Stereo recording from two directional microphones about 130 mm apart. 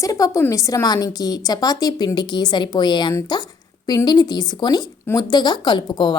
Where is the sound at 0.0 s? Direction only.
25° left (ahead or behind).